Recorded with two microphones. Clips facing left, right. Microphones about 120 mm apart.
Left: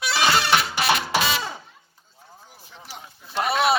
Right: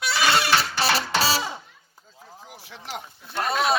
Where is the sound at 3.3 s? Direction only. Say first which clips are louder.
Left 2 dB; 5° left (ahead or behind).